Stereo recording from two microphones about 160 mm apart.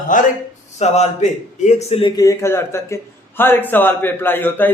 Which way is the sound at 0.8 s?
45° left (ahead or behind).